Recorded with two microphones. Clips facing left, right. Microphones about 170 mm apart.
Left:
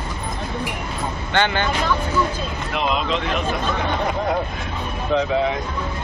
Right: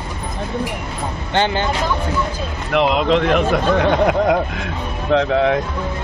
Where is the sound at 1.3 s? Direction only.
35° right (ahead or behind).